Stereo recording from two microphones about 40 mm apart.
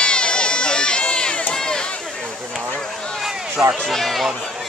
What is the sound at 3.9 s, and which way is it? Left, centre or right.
Speech, centre.